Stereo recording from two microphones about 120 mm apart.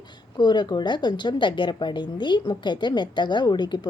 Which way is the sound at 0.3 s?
40° left (ahead or behind).